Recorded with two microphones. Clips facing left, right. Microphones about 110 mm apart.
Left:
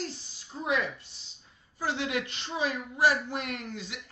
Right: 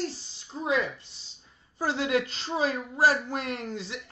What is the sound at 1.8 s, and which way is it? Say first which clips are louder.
Speech: right 4 dB; 40° right (ahead or behind).